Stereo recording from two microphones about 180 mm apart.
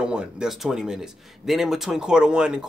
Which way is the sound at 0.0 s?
5° right (ahead or behind).